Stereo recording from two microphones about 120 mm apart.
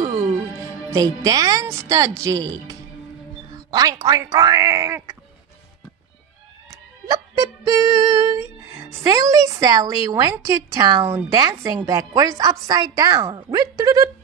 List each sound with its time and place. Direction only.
0.2 s a woman's voice: 25° right (ahead or behind)
3.5 s speech: 30° right (ahead or behind)
7.1 s music: 30° right (ahead or behind)
10.4 s speech: 30° right (ahead or behind)